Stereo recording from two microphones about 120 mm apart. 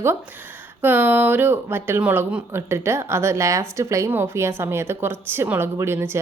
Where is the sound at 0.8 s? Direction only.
15° right (ahead or behind).